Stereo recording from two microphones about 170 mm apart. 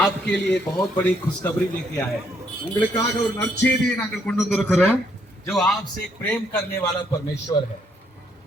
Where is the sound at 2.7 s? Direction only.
20° left (ahead or behind).